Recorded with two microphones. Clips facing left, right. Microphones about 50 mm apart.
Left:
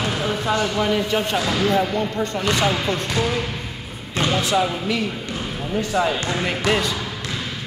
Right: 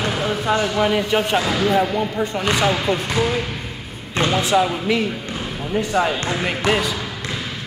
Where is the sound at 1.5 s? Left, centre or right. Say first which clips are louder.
Even; centre.